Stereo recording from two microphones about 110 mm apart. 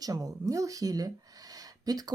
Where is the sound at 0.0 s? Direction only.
30° right (ahead or behind).